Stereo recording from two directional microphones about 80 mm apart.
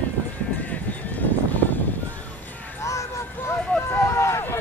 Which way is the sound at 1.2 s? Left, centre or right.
Left.